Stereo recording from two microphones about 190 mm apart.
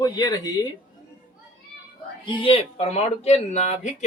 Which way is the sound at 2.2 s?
25° left (ahead or behind).